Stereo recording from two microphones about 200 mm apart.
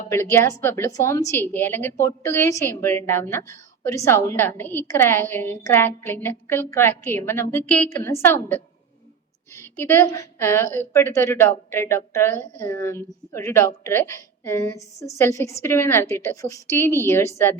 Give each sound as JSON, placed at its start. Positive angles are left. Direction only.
{"t": 0.1, "sound": "a woman's voice", "side_deg": 10}